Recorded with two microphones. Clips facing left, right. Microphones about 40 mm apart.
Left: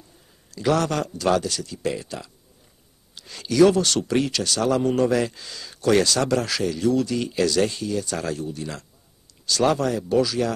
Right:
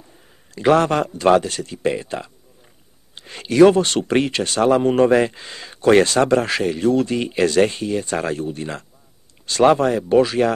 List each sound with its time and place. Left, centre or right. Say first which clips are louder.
0.5 s speech: right 6 dB; right